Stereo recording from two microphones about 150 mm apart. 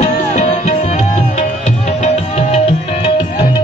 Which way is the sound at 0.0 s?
50° left (ahead or behind).